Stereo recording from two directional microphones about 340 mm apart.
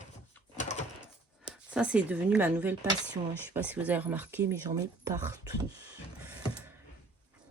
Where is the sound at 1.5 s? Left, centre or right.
Centre.